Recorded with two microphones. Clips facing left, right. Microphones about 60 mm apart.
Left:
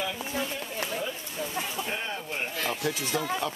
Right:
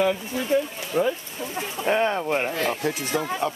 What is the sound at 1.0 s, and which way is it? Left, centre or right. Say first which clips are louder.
Speech: right 15 dB; right.